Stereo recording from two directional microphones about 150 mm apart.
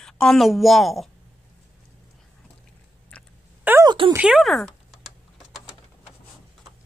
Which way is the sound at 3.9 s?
30° right (ahead or behind).